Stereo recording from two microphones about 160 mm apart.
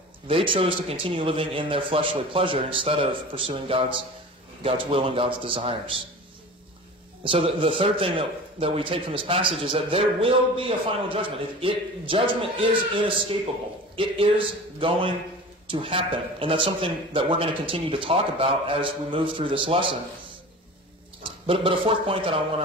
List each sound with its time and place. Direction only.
0.3 s a man's voice: 35° right (ahead or behind)
7.2 s a man's voice: 35° right (ahead or behind)
21.2 s a man's voice: 35° right (ahead or behind)